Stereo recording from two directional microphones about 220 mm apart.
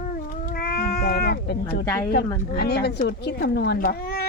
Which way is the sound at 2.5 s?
45° left (ahead or behind).